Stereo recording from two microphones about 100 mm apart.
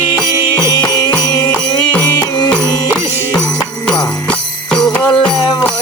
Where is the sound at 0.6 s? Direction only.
45° left (ahead or behind).